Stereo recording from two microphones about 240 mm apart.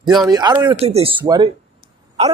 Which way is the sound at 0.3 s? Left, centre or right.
Centre.